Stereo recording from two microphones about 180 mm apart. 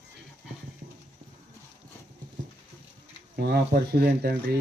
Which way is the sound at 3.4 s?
60° right (ahead or behind).